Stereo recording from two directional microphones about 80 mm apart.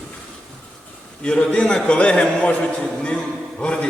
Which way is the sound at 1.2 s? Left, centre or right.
Centre.